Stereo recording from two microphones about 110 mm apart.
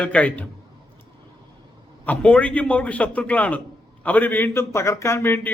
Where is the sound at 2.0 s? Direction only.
10° left (ahead or behind).